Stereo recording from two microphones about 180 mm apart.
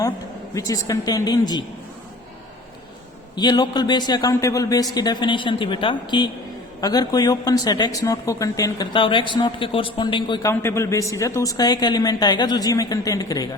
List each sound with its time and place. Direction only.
0.5 s a man's voice: 20° left (ahead or behind)
3.3 s a man's voice: 25° left (ahead or behind)
10.5 s a man's voice: 15° left (ahead or behind)